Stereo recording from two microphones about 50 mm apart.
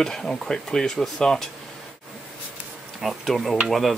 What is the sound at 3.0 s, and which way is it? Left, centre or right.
Speech, centre.